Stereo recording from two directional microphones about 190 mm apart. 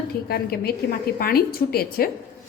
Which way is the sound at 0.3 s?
55° left (ahead or behind).